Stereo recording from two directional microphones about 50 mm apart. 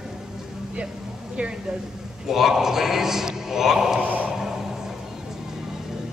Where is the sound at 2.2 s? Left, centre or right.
Centre.